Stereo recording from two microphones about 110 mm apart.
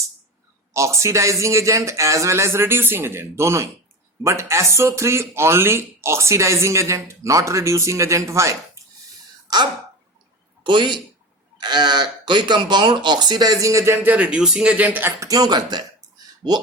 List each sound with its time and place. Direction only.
0.7 s speech: 25° right (ahead or behind)
9.5 s throat clearing: 40° right (ahead or behind)
10.6 s a man's voice: 45° right (ahead or behind); by 15.1 s 15° right (ahead or behind)
15.2 s speech: 35° right (ahead or behind)